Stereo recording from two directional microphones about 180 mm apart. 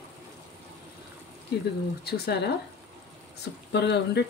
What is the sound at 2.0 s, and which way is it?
A woman's voice, 65° left (ahead or behind).